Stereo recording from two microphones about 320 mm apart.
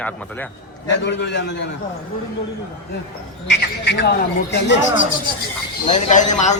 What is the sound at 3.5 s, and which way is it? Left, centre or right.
Speech, left.